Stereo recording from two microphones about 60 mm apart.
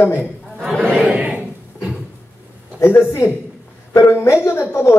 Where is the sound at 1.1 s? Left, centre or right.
Right.